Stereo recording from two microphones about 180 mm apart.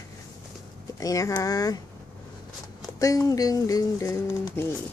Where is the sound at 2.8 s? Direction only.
20° left (ahead or behind).